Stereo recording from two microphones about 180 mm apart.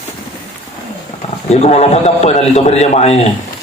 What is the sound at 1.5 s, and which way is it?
A man's voice, 35° left (ahead or behind).